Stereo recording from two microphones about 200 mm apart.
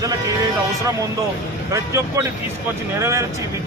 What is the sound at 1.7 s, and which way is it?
Speech, 15° right (ahead or behind).